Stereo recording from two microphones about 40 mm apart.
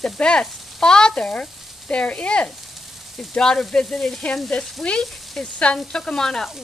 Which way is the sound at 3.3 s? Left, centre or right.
Centre.